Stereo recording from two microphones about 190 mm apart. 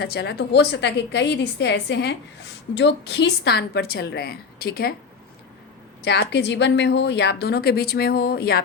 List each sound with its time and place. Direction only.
0.0 s a woman's voice: 60° left (ahead or behind)
6.0 s a woman's voice: 60° left (ahead or behind)